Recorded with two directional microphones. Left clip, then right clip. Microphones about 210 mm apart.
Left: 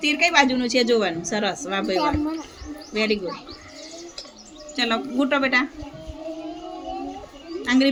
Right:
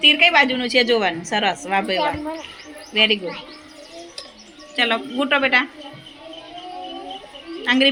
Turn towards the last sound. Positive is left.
turn(degrees=0)  # may be behind; listen again after turning